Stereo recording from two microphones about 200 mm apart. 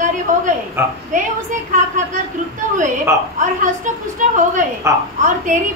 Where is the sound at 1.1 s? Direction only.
40° right (ahead or behind).